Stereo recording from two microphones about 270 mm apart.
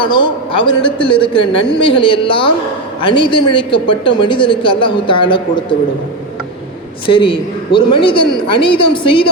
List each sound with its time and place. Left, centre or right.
0.0 s a woman's voice: centre
7.1 s a man's voice: centre